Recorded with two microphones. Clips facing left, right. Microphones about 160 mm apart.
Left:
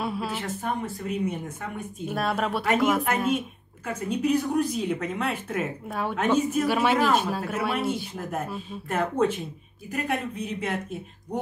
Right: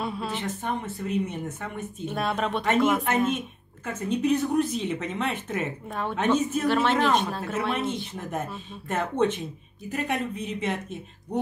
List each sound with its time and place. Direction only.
0.0 s a woman's voice: 5° left (ahead or behind)